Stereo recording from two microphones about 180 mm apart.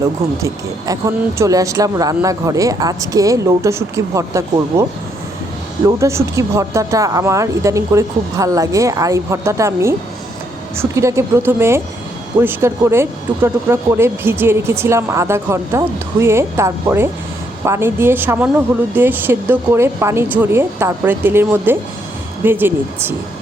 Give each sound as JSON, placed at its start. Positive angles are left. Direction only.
{"t": 0.0, "sound": "speech", "side_deg": -20}
{"t": 6.0, "sound": "speech", "side_deg": -15}